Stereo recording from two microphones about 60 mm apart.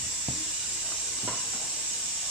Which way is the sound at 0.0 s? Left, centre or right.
Centre.